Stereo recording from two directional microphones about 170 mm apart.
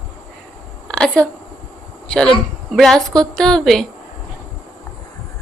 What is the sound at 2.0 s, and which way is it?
A woman's voice, 5° left (ahead or behind).